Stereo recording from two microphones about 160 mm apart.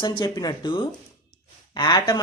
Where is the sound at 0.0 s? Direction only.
25° left (ahead or behind).